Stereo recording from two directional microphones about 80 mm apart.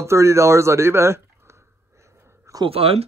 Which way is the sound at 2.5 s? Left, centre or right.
Right.